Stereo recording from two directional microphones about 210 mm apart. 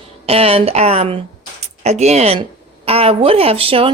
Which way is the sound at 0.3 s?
25° right (ahead or behind).